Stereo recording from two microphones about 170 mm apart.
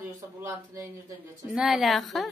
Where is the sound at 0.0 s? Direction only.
15° right (ahead or behind).